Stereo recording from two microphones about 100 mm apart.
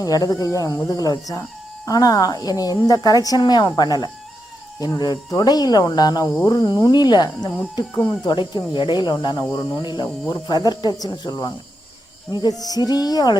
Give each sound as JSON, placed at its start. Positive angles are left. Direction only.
{"t": 0.0, "sound": "speech", "side_deg": 35}
{"t": 9.4, "sound": "speech", "side_deg": 35}
{"t": 12.5, "sound": "speech", "side_deg": 40}